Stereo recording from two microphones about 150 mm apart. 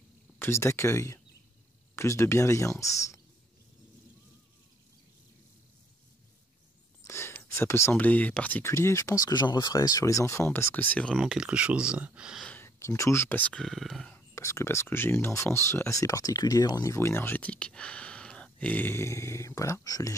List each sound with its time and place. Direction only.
0.4 s speech: 20° left (ahead or behind)
7.1 s speech: 15° left (ahead or behind)
11.1 s speech: 5° right (ahead or behind)
12.4 s speech: 15° left (ahead or behind)
14.3 s speech: 20° left (ahead or behind)